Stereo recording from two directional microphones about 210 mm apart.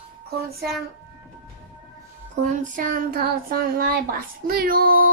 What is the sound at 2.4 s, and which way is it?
Speech, 35° right (ahead or behind).